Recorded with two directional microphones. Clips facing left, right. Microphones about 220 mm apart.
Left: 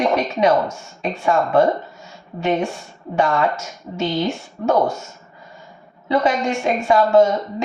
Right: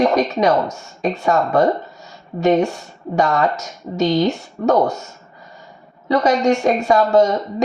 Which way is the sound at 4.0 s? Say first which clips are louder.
Right 5 dB; 40° right (ahead or behind).